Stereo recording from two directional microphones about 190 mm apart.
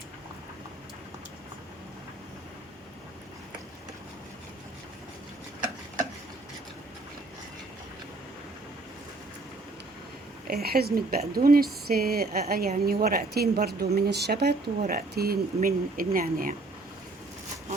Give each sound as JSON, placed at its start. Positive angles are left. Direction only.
{"t": 10.5, "sound": "a woman's voice", "side_deg": -55}